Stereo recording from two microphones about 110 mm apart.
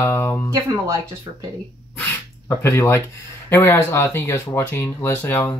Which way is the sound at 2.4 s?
25° left (ahead or behind).